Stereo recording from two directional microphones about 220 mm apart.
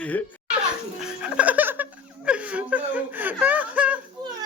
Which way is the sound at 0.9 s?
5° right (ahead or behind).